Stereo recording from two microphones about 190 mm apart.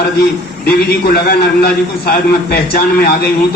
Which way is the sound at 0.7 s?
50° left (ahead or behind).